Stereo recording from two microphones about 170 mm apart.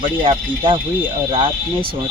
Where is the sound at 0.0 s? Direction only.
30° right (ahead or behind).